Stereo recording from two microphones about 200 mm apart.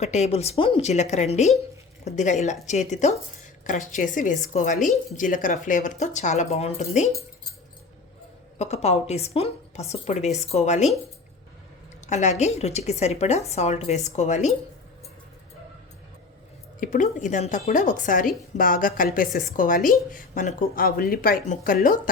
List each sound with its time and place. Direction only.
0.0 s a woman's voice: 35° left (ahead or behind)
8.5 s a woman's voice: 35° left (ahead or behind)
12.0 s a woman's voice: 35° left (ahead or behind)
16.8 s a woman's voice: 40° left (ahead or behind)